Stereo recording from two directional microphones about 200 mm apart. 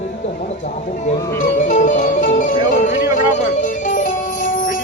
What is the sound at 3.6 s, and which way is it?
Music, 40° left (ahead or behind).